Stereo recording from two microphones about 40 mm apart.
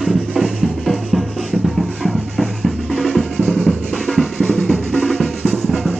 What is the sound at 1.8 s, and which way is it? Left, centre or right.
Drum, centre.